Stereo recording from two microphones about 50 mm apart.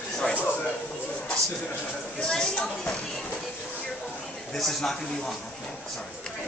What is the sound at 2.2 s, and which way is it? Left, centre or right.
Speech, centre.